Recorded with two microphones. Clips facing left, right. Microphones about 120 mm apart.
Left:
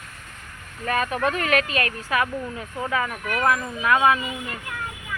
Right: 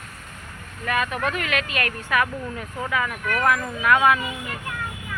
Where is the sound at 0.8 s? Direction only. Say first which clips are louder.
Left 1 dB; 35° left (ahead or behind).